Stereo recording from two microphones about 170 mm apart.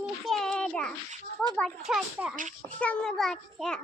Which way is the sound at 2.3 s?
50° right (ahead or behind).